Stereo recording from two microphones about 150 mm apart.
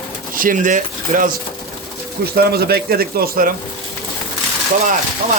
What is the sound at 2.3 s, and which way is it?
A man's voice, 90° right.